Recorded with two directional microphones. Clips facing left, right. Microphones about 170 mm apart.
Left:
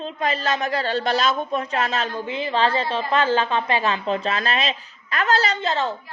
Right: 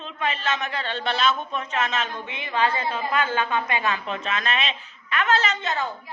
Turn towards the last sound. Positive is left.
turn(degrees=30)  # may be behind; listen again after turning